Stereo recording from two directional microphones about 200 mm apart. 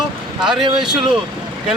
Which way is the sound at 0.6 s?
25° right (ahead or behind).